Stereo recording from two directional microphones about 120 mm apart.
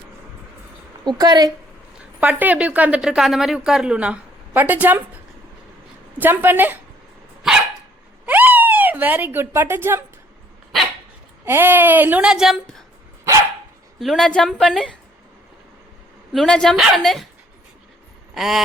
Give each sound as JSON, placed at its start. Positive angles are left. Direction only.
{"t": 1.0, "sound": "a woman's voice", "side_deg": -35}
{"t": 2.2, "sound": "a woman's voice", "side_deg": -10}
{"t": 6.1, "sound": "a woman's voice", "side_deg": -15}
{"t": 8.3, "sound": "a sound", "side_deg": -15}
{"t": 11.4, "sound": "a woman's voice", "side_deg": -15}
{"t": 14.0, "sound": "a woman's voice", "side_deg": 0}
{"t": 16.3, "sound": "a woman's voice", "side_deg": 5}
{"t": 18.3, "sound": "a woman's voice", "side_deg": 0}